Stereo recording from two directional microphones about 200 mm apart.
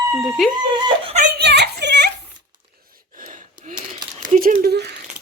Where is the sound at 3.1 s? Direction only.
40° right (ahead or behind).